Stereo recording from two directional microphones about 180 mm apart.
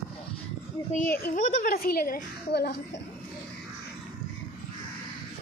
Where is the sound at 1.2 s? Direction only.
50° left (ahead or behind).